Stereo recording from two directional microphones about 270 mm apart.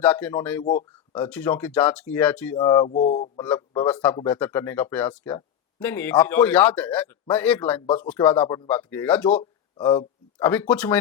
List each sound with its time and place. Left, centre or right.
0.0 s speech: centre
2.6 s speech: centre
3.8 s speech: centre
9.3 s speech: centre